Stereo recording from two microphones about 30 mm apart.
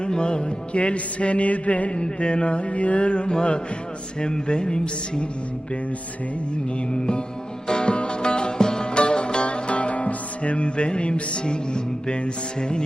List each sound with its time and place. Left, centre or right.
0.0 s music: left
0.8 s mantra: left
1.9 s mantra: left
7.7 s music: left